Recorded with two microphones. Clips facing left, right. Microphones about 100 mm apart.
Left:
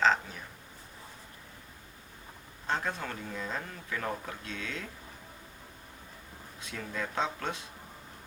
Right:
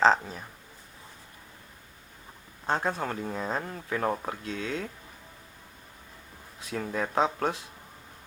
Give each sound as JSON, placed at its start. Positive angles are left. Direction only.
{"t": 0.0, "sound": "a sound", "side_deg": -35}
{"t": 2.6, "sound": "speech", "side_deg": -35}
{"t": 6.7, "sound": "speech", "side_deg": -40}